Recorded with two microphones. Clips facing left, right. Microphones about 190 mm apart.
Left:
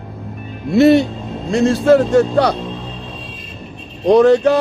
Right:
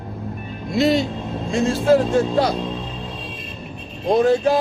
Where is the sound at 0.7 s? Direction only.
60° left (ahead or behind).